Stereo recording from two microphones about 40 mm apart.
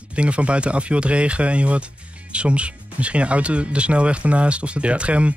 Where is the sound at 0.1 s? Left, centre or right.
Right.